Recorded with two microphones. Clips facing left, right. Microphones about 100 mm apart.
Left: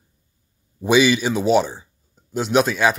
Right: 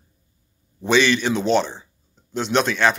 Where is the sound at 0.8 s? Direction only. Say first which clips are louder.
Left 2 dB; 10° left (ahead or behind).